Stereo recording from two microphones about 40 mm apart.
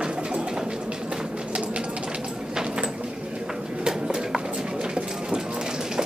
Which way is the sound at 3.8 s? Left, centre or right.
Centre.